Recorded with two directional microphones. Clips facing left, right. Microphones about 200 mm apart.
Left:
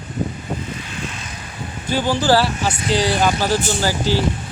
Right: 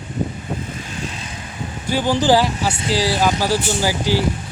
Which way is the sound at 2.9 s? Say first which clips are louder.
Left 1 dB; 5° right (ahead or behind).